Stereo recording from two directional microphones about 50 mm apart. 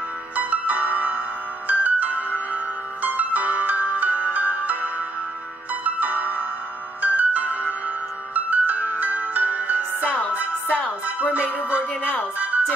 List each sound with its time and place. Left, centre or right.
0.4 s music: right